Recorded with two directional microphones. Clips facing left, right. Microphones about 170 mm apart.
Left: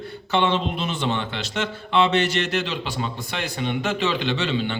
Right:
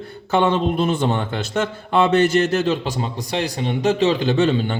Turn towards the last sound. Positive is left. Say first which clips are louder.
# right 6 dB
turn(degrees=-45)  # may be behind; listen again after turning